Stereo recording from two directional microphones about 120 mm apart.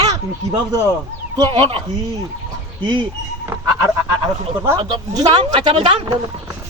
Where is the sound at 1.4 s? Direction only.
45° right (ahead or behind).